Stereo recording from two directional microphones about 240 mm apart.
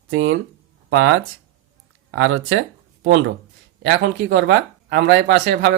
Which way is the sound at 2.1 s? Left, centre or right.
Right.